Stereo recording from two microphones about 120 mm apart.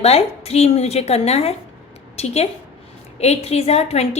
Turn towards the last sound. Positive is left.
turn(degrees=60)  # may be behind; listen again after turning